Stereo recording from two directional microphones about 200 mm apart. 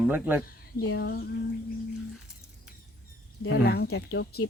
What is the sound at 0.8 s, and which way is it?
Speech, 55° left (ahead or behind).